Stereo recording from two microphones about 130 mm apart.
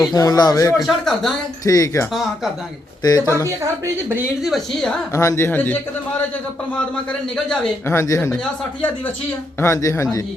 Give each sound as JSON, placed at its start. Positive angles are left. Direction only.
{"t": 0.1, "sound": "speech", "side_deg": 30}
{"t": 0.8, "sound": "a woman's voice", "side_deg": 0}
{"t": 1.6, "sound": "speech", "side_deg": 25}
{"t": 4.4, "sound": "a woman's voice", "side_deg": 0}
{"t": 5.1, "sound": "a man's voice", "side_deg": 20}
{"t": 7.9, "sound": "speech", "side_deg": 20}
{"t": 9.6, "sound": "speech", "side_deg": 20}